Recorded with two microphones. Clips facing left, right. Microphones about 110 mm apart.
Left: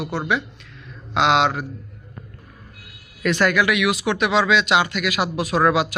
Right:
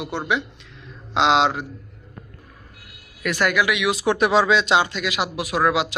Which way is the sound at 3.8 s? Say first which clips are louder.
Right 1 dB; 35° right (ahead or behind).